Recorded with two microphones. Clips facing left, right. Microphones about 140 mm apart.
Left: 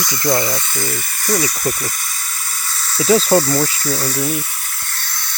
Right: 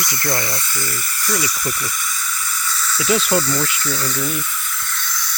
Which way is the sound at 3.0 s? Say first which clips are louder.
Left 6 dB; 35° left (ahead or behind).